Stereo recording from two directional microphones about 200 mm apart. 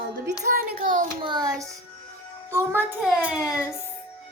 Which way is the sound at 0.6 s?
40° right (ahead or behind).